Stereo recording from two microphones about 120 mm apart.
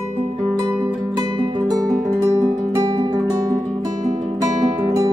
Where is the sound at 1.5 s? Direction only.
30° right (ahead or behind).